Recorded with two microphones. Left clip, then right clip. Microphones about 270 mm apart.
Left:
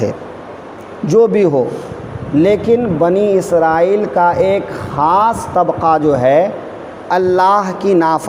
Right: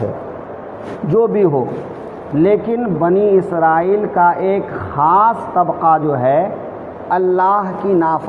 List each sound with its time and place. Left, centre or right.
1.1 s speech: left